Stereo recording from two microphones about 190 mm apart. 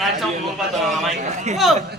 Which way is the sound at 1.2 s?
35° right (ahead or behind).